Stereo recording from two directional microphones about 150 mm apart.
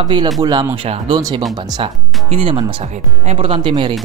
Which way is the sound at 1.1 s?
20° right (ahead or behind).